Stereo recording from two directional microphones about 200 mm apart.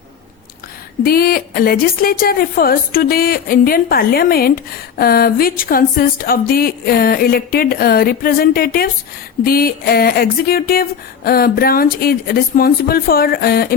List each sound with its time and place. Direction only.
1.0 s speech: 50° left (ahead or behind)